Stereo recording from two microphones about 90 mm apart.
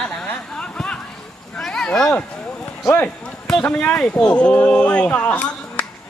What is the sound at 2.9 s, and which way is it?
Speech, 20° left (ahead or behind).